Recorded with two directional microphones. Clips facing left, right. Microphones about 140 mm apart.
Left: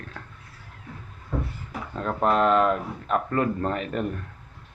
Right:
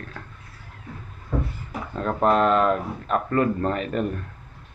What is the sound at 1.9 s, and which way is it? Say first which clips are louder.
Speech: right 2 dB; 10° left (ahead or behind).